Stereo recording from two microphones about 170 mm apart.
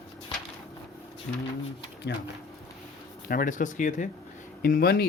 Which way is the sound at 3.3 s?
55° left (ahead or behind).